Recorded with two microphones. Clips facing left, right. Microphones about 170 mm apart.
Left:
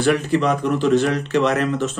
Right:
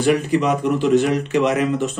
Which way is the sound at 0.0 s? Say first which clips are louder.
Right 1 dB; 15° right (ahead or behind).